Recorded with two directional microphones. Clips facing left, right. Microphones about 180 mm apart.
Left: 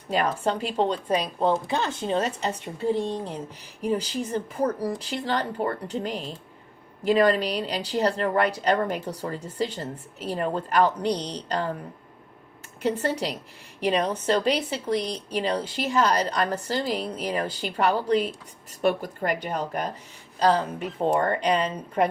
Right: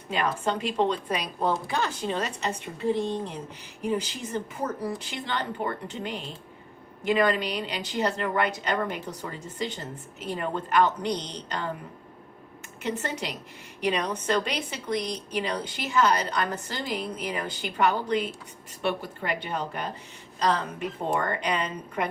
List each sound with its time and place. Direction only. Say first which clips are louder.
0.1 s speech: left 3 dB; 35° left (ahead or behind)
3.8 s speech: left 3 dB; 35° left (ahead or behind)
12.8 s speech: left 6 dB; 35° left (ahead or behind)